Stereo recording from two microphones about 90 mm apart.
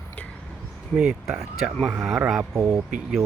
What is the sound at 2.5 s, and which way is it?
Speech, 25° right (ahead or behind).